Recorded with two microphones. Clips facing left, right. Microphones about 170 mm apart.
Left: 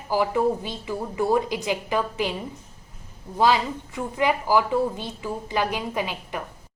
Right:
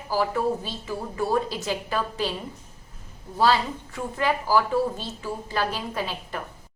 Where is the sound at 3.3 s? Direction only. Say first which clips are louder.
Left 1 dB; 15° left (ahead or behind).